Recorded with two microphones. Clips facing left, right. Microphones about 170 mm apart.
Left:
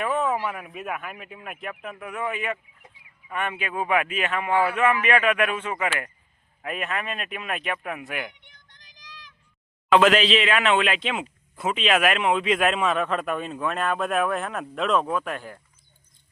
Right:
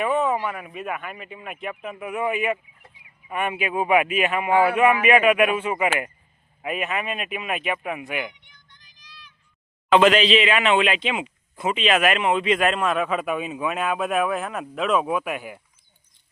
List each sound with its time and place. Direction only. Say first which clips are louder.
0.0 s speech: right 3 dB; centre (ahead or behind)
8.4 s vehicle: left 1 dB; 80° left
9.9 s speech: right 2 dB; centre (ahead or behind)